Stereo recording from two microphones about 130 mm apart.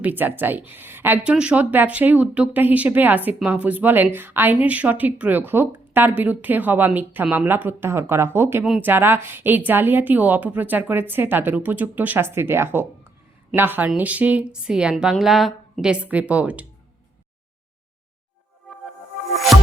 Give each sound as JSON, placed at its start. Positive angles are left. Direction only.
{"t": 0.0, "sound": "speech", "side_deg": -15}